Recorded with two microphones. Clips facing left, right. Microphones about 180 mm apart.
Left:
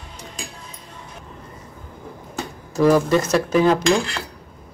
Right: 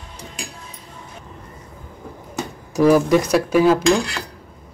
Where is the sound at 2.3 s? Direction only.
10° right (ahead or behind).